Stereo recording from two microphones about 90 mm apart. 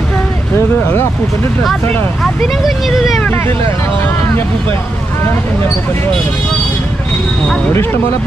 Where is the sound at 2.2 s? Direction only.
Centre (ahead or behind).